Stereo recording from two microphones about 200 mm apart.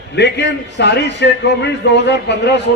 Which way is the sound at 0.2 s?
60° left (ahead or behind).